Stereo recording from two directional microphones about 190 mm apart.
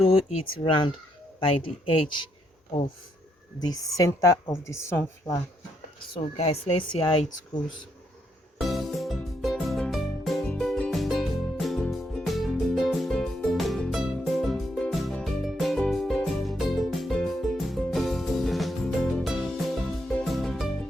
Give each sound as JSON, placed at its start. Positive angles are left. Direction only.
{"t": 0.4, "sound": "speech", "side_deg": 25}
{"t": 3.6, "sound": "a woman's voice", "side_deg": 20}
{"t": 6.3, "sound": "speech", "side_deg": 30}
{"t": 8.6, "sound": "music", "side_deg": 0}